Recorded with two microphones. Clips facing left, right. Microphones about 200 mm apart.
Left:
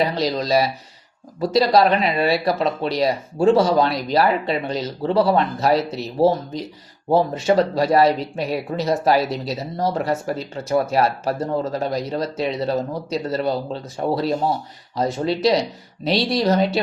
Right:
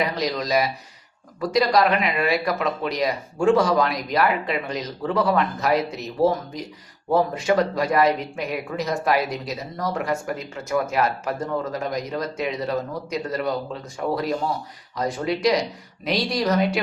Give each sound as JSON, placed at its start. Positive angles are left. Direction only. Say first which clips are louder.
{"t": 0.0, "sound": "speech", "louder": "left 4 dB", "side_deg": 30}